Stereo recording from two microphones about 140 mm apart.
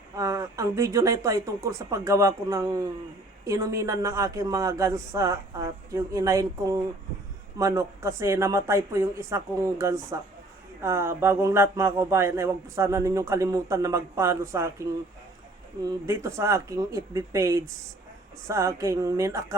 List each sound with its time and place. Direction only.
0.2 s speech: 25° right (ahead or behind)